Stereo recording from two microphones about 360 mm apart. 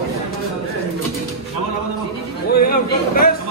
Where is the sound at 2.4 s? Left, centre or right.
Left.